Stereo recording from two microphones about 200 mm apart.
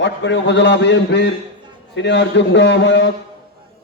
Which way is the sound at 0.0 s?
60° left (ahead or behind).